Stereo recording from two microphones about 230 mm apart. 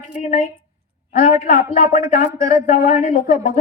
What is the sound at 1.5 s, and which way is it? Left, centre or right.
A woman's voice, left.